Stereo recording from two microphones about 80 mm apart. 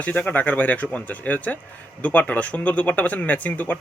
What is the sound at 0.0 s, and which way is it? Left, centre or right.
Speech, centre.